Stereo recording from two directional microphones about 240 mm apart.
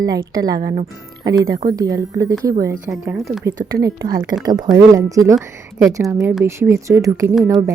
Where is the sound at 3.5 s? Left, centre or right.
Right.